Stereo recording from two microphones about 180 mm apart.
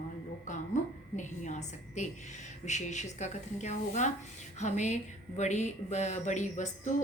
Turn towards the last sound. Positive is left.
turn(degrees=40)  # may be behind; listen again after turning